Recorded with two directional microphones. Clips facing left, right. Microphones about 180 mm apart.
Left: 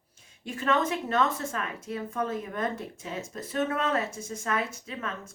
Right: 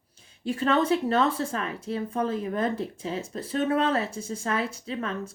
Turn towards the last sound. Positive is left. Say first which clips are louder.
# right 5 dB
turn(degrees=-30)  # may be behind; listen again after turning